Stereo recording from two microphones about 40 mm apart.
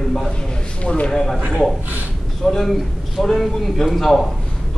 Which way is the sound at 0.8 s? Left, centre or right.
Left.